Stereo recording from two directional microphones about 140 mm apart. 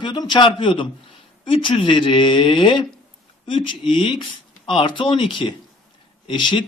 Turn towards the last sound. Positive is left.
turn(degrees=35)  # may be behind; listen again after turning